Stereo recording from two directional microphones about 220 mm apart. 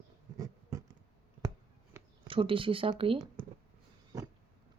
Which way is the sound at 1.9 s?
10° right (ahead or behind).